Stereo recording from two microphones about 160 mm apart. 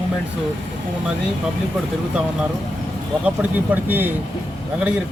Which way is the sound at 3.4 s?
10° right (ahead or behind).